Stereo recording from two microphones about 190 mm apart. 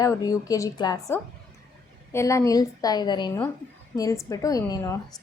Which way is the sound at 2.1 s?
15° left (ahead or behind).